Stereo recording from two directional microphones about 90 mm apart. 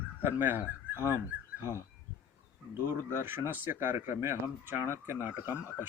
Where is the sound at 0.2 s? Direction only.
25° right (ahead or behind).